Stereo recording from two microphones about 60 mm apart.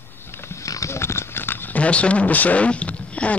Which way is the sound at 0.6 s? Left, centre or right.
Left.